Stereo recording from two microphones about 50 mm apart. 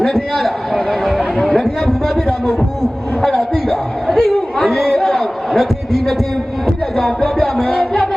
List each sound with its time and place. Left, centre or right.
0.0 s a man's voice: centre
3.2 s a sound: centre
7.2 s speech: centre
7.5 s music: centre